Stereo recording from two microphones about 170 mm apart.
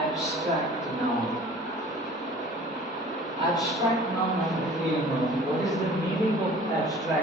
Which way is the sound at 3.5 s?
Centre (ahead or behind).